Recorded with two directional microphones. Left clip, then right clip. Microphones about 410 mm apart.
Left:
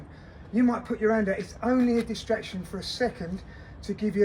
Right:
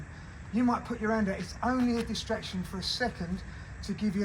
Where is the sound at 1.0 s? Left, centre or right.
Centre.